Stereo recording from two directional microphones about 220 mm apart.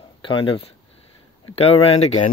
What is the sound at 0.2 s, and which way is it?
Speech, 20° left (ahead or behind).